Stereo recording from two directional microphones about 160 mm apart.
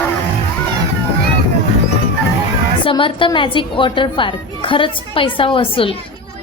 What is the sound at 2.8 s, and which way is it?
A woman's voice, 30° left (ahead or behind).